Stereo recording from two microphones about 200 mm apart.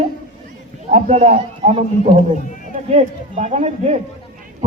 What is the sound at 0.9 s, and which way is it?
A man's voice, 35° right (ahead or behind).